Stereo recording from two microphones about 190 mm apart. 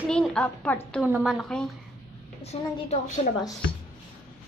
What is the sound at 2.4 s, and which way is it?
Speech, 35° left (ahead or behind).